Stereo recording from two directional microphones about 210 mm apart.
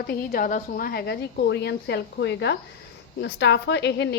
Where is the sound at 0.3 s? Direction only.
40° left (ahead or behind).